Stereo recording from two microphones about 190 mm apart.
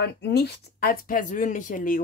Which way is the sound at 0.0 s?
60° left (ahead or behind).